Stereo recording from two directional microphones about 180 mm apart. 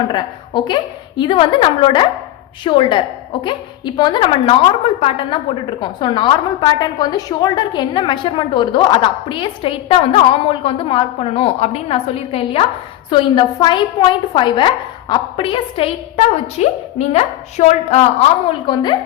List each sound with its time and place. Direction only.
0.1 s a woman's voice: 25° left (ahead or behind)
18.4 s a woman's voice: 25° left (ahead or behind)